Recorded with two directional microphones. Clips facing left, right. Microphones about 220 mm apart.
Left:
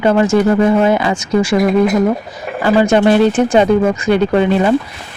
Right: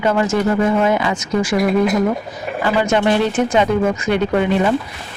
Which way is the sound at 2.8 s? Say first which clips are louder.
Left 6 dB; 35° left (ahead or behind).